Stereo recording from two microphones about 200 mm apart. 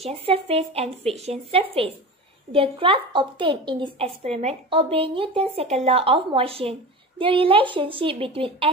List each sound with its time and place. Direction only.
0.0 s a woman's voice: 30° right (ahead or behind)